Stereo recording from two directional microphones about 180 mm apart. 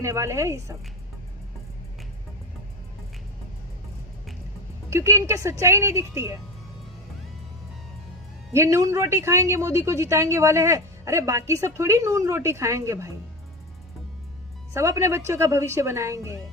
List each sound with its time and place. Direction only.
0.0 s a woman's voice: 15° right (ahead or behind)
4.9 s a woman's voice: 15° right (ahead or behind)
8.5 s a woman's voice: 15° right (ahead or behind)
14.7 s a woman's voice: 15° right (ahead or behind)